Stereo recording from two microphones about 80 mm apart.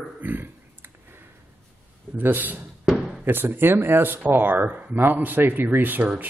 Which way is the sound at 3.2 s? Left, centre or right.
Right.